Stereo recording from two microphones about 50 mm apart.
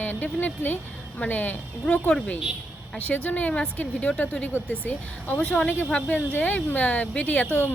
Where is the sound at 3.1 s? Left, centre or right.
Left.